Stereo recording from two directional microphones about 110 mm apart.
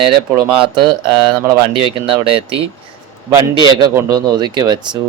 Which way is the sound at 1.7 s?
55° right (ahead or behind).